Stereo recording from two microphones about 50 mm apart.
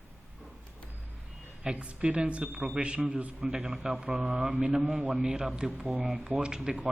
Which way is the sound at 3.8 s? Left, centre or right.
Centre.